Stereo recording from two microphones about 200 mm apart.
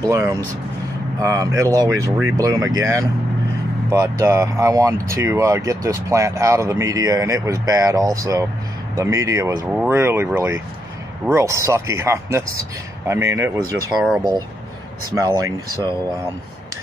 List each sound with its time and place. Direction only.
0.1 s speech: 15° right (ahead or behind)
15.0 s speech: 20° right (ahead or behind)